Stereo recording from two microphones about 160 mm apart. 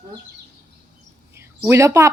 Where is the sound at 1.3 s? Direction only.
15° right (ahead or behind).